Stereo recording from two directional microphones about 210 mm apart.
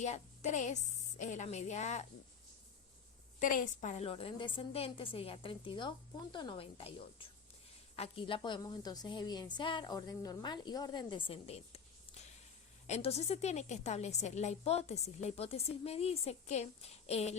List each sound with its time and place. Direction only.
0.0 s a woman's voice: 35° left (ahead or behind)
3.4 s a woman's voice: 40° left (ahead or behind)
12.9 s a woman's voice: 30° left (ahead or behind)